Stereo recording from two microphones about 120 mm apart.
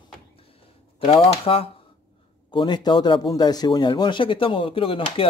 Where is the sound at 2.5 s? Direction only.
40° left (ahead or behind).